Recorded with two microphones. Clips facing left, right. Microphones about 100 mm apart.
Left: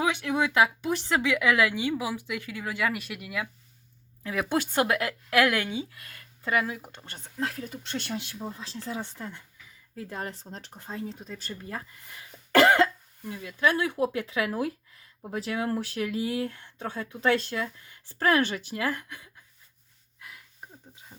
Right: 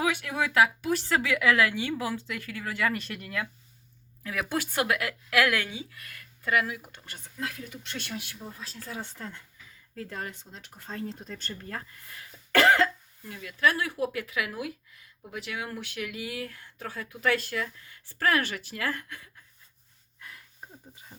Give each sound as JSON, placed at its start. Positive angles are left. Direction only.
{"t": 0.0, "sound": "speech", "side_deg": 20}
{"t": 4.2, "sound": "speech", "side_deg": 25}
{"t": 10.2, "sound": "speech", "side_deg": 35}
{"t": 10.9, "sound": "speech", "side_deg": 5}
{"t": 11.6, "sound": "speech", "side_deg": 15}
{"t": 20.1, "sound": "a sound", "side_deg": 5}